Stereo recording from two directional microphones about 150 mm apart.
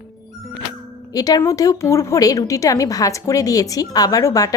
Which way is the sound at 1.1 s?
25° left (ahead or behind).